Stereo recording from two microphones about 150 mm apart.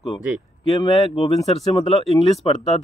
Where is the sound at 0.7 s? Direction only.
40° left (ahead or behind).